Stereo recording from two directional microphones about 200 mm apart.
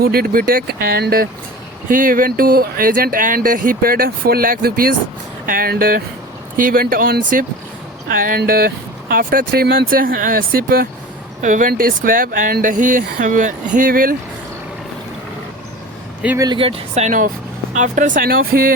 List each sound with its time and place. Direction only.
0.0 s speech: 50° right (ahead or behind)
16.2 s speech: 10° right (ahead or behind)
16.5 s speech: 30° right (ahead or behind); by 18.7 s 45° right (ahead or behind)